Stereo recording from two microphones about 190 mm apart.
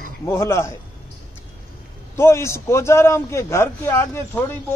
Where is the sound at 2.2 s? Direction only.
15° left (ahead or behind).